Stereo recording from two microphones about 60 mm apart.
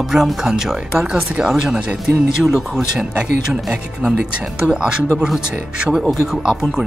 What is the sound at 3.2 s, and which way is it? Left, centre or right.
Speech, centre.